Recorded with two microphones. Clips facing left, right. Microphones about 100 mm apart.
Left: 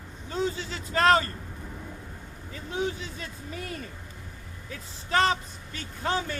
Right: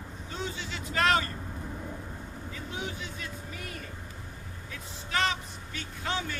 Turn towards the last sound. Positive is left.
turn(degrees=40)  # may be behind; listen again after turning